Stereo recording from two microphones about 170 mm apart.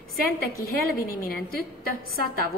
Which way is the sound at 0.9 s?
60° left (ahead or behind).